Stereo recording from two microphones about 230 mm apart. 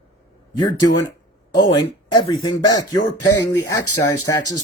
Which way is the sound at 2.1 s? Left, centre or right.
Centre.